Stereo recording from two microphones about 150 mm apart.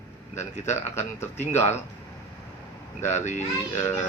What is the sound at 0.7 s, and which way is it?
Speech, 15° left (ahead or behind).